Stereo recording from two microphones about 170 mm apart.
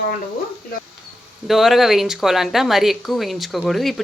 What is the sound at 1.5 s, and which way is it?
Speech, centre (ahead or behind).